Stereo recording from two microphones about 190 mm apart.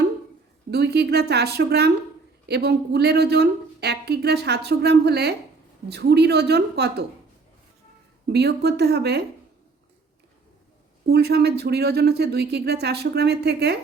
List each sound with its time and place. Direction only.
0.7 s speech: 60° right (ahead or behind)
8.3 s speech: 60° right (ahead or behind)
11.0 s speech: 55° right (ahead or behind)